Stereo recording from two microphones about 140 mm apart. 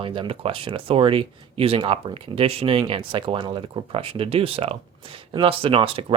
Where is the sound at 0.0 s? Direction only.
40° right (ahead or behind).